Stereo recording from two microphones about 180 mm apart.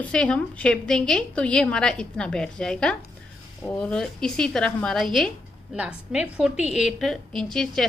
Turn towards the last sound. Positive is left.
turn(degrees=0)  # may be behind; listen again after turning